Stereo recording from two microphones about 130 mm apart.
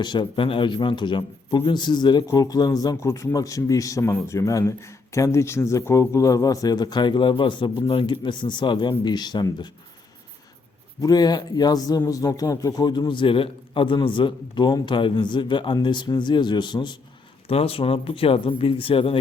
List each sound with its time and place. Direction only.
0.0 s a man's voice: 35° left (ahead or behind)
11.0 s a man's voice: 30° left (ahead or behind)
17.5 s speech: 50° left (ahead or behind)